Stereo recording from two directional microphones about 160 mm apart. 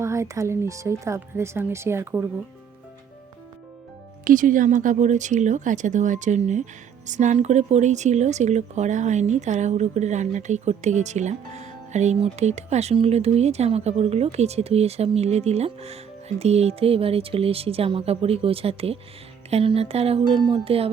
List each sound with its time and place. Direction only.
0.0 s speech: 20° right (ahead or behind)
4.2 s speech: 55° right (ahead or behind); by 20.9 s 35° right (ahead or behind)